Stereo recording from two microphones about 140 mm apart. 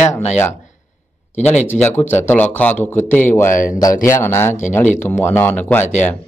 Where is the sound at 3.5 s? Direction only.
70° left (ahead or behind).